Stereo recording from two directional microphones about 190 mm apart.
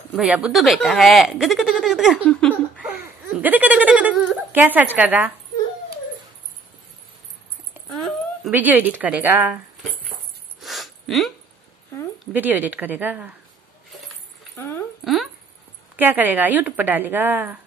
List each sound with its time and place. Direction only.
0.1 s speech: 5° right (ahead or behind)
2.2 s a sound: 5° left (ahead or behind)
8.0 s speech: 10° right (ahead or behind)
10.6 s a sound: centre (ahead or behind)
12.3 s a woman's voice: 10° right (ahead or behind)
16.0 s a woman's voice: 10° right (ahead or behind)